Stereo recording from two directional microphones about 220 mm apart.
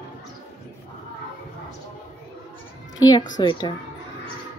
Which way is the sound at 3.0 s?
20° left (ahead or behind).